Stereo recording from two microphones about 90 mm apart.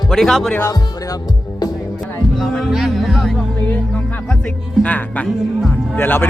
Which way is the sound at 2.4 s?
Centre (ahead or behind).